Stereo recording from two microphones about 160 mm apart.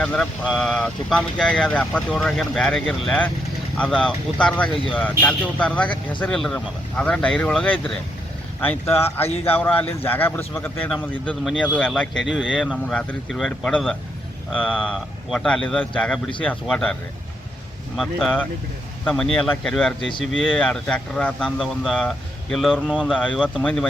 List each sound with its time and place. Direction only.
0.0 s speech: 5° left (ahead or behind)
12.3 s speech: 5° right (ahead or behind)
23.1 s speech: 5° left (ahead or behind)